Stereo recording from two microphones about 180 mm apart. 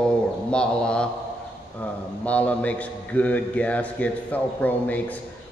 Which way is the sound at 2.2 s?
10° left (ahead or behind).